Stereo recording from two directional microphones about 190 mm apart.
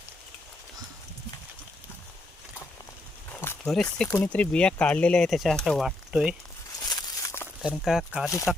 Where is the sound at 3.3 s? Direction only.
10° left (ahead or behind).